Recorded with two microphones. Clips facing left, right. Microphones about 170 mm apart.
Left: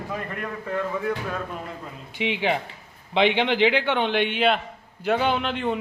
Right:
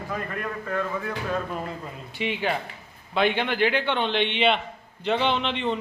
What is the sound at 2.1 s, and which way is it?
A man's voice, 15° left (ahead or behind).